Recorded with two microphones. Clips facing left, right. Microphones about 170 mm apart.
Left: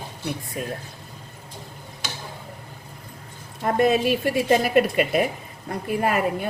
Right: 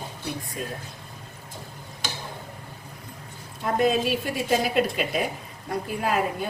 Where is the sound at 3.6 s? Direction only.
60° left (ahead or behind).